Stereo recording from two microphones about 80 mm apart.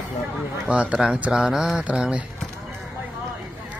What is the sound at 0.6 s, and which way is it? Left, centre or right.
Speech, centre.